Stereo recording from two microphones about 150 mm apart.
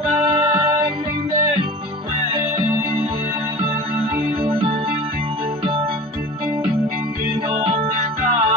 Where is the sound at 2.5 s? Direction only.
40° right (ahead or behind).